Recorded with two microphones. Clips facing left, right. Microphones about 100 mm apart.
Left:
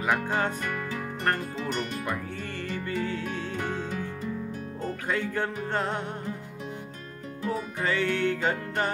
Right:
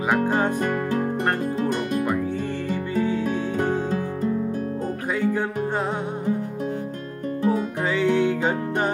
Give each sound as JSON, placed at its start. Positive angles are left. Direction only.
{"t": 0.6, "sound": "music", "side_deg": -45}
{"t": 2.7, "sound": "music", "side_deg": -15}
{"t": 5.1, "sound": "music", "side_deg": -10}
{"t": 7.4, "sound": "music", "side_deg": -15}